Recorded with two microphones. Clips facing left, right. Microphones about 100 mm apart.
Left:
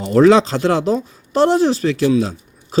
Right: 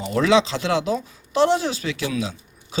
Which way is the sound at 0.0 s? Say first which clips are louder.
Left 7 dB; 40° left (ahead or behind).